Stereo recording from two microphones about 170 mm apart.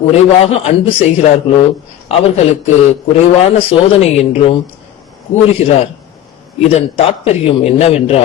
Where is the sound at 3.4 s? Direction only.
40° left (ahead or behind).